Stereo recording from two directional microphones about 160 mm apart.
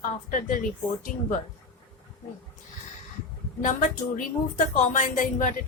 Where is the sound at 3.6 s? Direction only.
55° left (ahead or behind).